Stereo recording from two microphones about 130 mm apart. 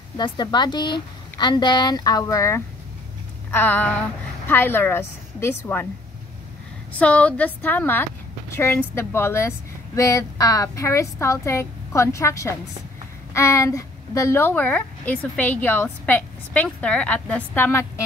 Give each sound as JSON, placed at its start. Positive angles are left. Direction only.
{"t": 0.2, "sound": "a woman's voice", "side_deg": 35}
{"t": 3.5, "sound": "a woman's voice", "side_deg": 10}
{"t": 6.9, "sound": "a woman's voice", "side_deg": 10}